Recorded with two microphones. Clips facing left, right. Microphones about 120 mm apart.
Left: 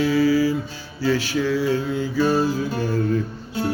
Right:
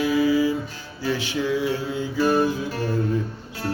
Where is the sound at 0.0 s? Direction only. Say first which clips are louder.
Left 2 dB; 20° right (ahead or behind).